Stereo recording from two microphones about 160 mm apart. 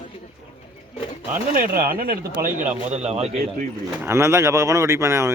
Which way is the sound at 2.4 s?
50° right (ahead or behind).